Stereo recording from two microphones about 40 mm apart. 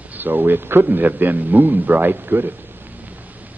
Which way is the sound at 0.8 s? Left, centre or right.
Right.